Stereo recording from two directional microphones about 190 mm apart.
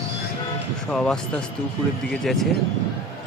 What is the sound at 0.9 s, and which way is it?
Speech, 5° left (ahead or behind).